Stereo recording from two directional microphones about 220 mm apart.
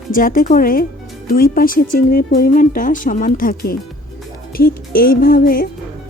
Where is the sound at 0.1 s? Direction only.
40° left (ahead or behind).